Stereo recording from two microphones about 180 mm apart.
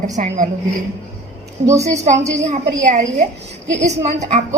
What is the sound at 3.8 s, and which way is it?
Speech, 40° right (ahead or behind).